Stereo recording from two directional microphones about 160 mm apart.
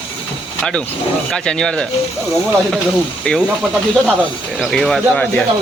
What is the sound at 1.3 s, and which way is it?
Speech, 5° left (ahead or behind).